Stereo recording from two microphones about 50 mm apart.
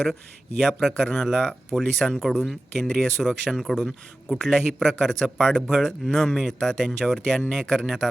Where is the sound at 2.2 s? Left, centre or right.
Centre.